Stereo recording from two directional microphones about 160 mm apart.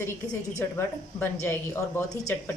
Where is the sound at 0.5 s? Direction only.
15° left (ahead or behind).